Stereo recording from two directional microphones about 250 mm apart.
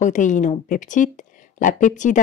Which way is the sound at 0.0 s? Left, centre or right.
Left.